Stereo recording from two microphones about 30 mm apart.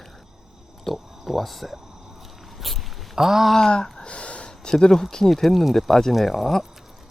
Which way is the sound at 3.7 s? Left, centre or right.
Left.